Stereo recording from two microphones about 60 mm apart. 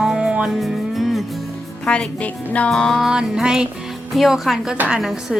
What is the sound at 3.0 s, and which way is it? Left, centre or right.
Speech, centre.